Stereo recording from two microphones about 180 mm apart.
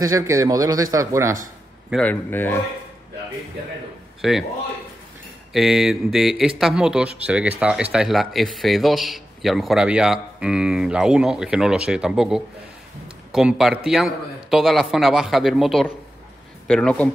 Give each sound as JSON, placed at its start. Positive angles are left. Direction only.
{"t": 0.1, "sound": "speech", "side_deg": -15}
{"t": 1.9, "sound": "a man's voice", "side_deg": 5}
{"t": 4.2, "sound": "a man's voice", "side_deg": 0}
{"t": 5.5, "sound": "speech", "side_deg": 0}